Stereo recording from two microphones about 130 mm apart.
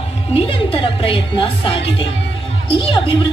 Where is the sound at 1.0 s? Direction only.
45° left (ahead or behind).